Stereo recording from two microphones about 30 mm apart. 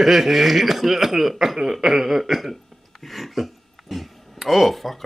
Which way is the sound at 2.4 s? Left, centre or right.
Centre.